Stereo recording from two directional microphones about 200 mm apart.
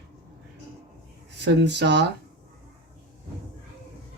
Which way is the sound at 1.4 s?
60° right (ahead or behind).